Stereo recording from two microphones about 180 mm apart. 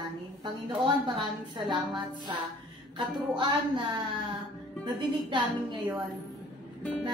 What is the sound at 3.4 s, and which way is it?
A woman's voice, 25° right (ahead or behind).